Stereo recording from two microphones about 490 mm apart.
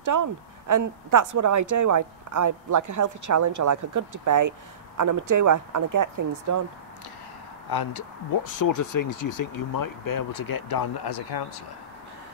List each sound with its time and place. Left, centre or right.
0.0 s speech: right
7.7 s speech: left